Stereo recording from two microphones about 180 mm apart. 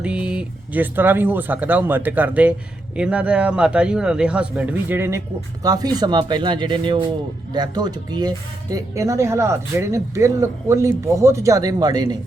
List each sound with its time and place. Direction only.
0.0 s speech: 5° right (ahead or behind); by 12.1 s 20° right (ahead or behind)